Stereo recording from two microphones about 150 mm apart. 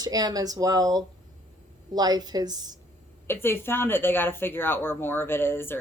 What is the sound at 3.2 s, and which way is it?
Speech, 15° left (ahead or behind).